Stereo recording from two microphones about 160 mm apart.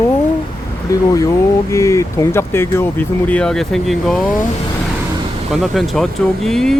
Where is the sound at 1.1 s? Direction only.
20° left (ahead or behind); by 4.3 s 5° left (ahead or behind).